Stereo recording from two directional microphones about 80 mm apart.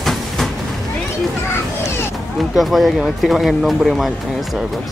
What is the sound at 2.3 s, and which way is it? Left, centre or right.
Speech, centre.